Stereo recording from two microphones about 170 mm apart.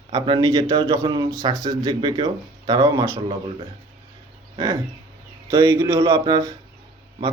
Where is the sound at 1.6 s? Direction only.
25° right (ahead or behind).